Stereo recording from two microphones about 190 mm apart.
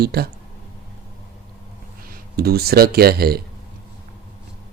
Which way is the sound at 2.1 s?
55° right (ahead or behind).